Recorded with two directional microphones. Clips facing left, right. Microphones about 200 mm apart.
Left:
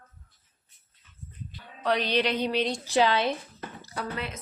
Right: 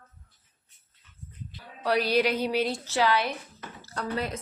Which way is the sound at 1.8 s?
5° right (ahead or behind).